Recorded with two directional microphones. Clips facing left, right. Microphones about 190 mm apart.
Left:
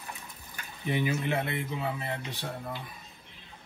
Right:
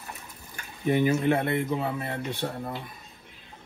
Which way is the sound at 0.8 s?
45° right (ahead or behind).